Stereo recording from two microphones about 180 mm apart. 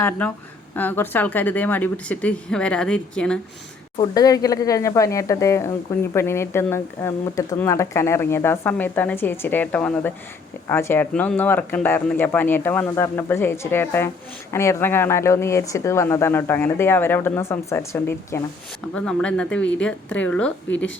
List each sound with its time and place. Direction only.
0.0 s speech: 10° left (ahead or behind)
3.9 s speech: 20° left (ahead or behind)
20.7 s speech: 90° left